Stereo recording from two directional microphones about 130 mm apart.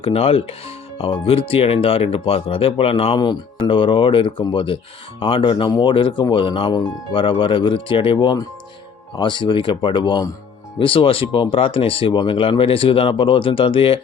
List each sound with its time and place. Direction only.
0.0 s speech: 50° left (ahead or behind)
3.2 s speech: 35° left (ahead or behind)